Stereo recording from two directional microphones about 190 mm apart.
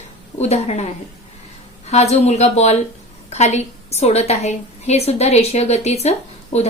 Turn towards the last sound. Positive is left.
turn(degrees=35)  # may be behind; listen again after turning